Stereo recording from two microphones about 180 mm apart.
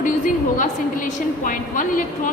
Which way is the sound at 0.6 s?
45° left (ahead or behind).